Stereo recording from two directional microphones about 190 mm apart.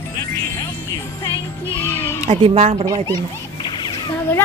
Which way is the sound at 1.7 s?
10° left (ahead or behind).